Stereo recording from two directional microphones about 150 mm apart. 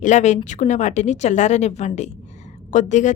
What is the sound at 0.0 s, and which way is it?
A woman's voice, 50° left (ahead or behind).